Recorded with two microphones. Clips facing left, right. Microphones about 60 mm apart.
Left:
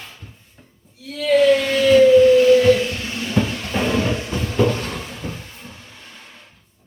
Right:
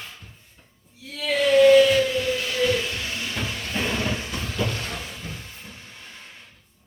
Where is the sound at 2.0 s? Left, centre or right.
Left.